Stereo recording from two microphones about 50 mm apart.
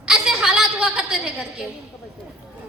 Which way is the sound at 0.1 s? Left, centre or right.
Centre.